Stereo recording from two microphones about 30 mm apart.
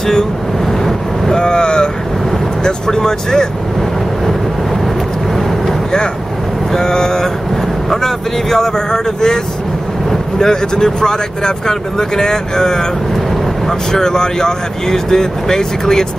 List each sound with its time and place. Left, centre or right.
0.8 s vehicle: centre
1.4 s vehicle: left
2.6 s speech: centre
6.7 s speech: centre
7.9 s speech: centre
10.4 s speech: centre